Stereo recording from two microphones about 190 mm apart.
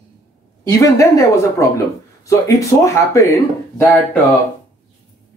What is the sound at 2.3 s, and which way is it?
Speech, 15° left (ahead or behind).